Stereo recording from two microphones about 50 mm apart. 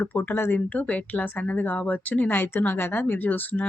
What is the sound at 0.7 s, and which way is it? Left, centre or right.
Speech, left.